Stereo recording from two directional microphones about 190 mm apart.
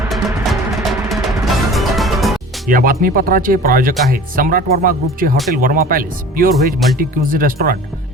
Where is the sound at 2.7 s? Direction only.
50° right (ahead or behind).